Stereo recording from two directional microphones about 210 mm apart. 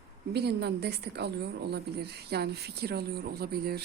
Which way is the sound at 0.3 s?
50° right (ahead or behind).